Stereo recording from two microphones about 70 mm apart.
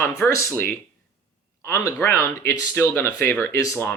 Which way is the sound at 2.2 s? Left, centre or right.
Left.